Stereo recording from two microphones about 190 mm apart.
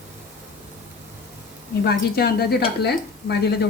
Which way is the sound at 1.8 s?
55° left (ahead or behind).